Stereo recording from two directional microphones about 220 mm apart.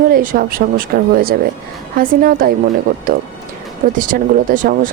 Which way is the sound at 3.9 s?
40° right (ahead or behind).